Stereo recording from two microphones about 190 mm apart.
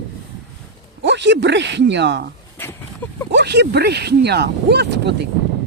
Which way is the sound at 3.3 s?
60° right (ahead or behind).